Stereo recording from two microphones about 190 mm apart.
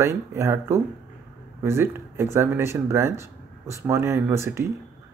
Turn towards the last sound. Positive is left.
turn(degrees=-15)  # may be behind; listen again after turning